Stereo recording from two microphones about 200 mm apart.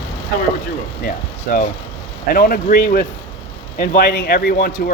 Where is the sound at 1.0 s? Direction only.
45° left (ahead or behind).